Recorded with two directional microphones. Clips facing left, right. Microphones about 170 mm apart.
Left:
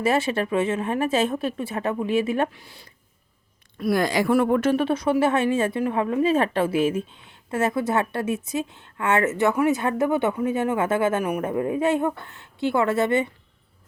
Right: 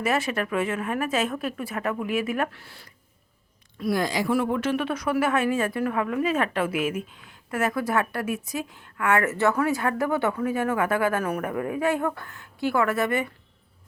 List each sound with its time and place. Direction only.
0.0 s a woman's voice: 30° left (ahead or behind)
2.6 s a woman's voice: 15° left (ahead or behind)
3.8 s a woman's voice: 60° left (ahead or behind); by 11.2 s 25° left (ahead or behind)
11.2 s a woman's voice: 15° left (ahead or behind)
11.4 s a woman's voice: 25° left (ahead or behind)